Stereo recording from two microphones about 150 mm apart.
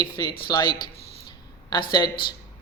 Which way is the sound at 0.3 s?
90° left.